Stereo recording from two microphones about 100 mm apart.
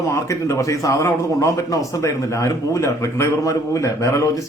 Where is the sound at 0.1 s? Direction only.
30° left (ahead or behind).